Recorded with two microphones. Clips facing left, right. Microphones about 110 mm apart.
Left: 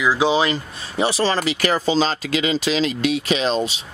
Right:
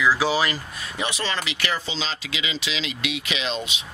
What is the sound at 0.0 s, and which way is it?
Speech, 20° left (ahead or behind).